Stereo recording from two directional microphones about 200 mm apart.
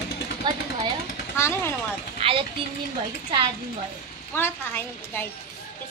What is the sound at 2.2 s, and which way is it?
Speech, 30° right (ahead or behind).